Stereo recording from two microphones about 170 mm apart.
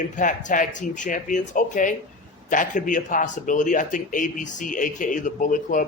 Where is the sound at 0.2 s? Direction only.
50° left (ahead or behind).